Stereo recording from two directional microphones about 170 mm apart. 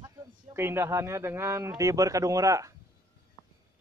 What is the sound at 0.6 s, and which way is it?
Speech, 15° right (ahead or behind).